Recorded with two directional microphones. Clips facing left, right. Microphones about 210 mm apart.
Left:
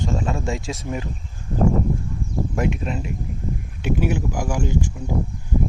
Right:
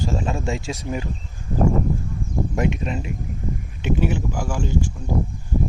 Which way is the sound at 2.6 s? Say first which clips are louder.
Even; centre (ahead or behind).